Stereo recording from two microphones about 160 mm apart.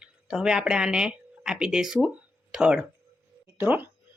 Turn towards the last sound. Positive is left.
turn(degrees=-10)  # may be behind; listen again after turning